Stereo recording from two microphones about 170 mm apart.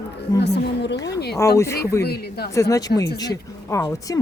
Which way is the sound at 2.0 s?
70° left (ahead or behind).